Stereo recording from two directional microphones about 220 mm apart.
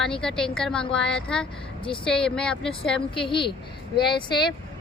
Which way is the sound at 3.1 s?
25° left (ahead or behind).